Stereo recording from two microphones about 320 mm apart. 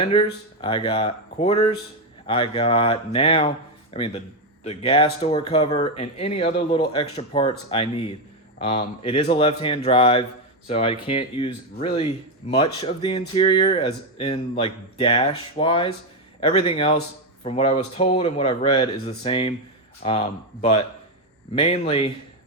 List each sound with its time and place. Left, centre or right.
0.0 s speech: centre